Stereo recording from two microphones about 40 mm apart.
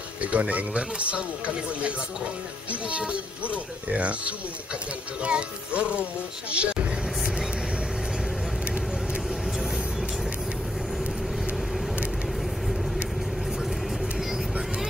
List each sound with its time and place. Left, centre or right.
0.2 s a man's voice: right
5.2 s music: right
6.5 s vehicle: right